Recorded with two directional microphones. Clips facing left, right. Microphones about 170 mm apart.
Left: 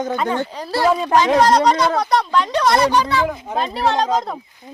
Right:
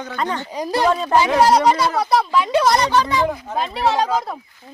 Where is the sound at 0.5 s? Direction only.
15° right (ahead or behind).